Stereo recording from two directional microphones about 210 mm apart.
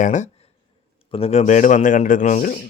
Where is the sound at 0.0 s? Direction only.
35° left (ahead or behind).